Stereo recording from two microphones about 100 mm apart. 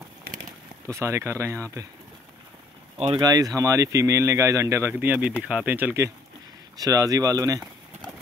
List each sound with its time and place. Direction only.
0.8 s speech: 30° right (ahead or behind)
3.2 s speech: 40° right (ahead or behind); by 5.9 s 15° right (ahead or behind)
6.8 s speech: 35° right (ahead or behind)